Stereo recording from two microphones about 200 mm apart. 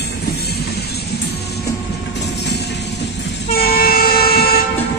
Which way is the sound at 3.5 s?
50° left (ahead or behind).